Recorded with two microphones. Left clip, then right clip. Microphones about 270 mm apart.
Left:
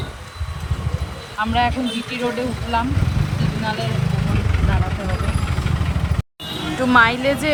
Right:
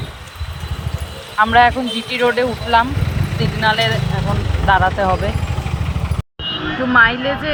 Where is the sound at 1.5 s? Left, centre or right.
Centre.